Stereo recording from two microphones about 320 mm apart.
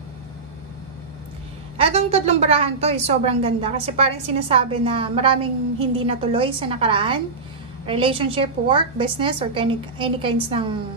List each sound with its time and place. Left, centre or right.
1.8 s a woman's voice: centre